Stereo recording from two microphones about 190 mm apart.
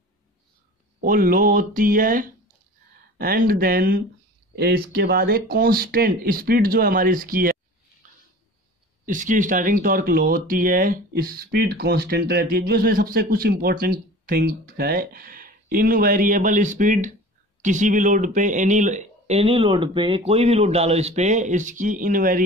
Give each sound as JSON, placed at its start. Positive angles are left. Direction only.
{"t": 1.0, "sound": "speech", "side_deg": -50}
{"t": 9.0, "sound": "speech", "side_deg": -45}